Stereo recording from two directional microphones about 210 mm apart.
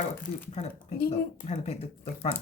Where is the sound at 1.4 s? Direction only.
30° left (ahead or behind).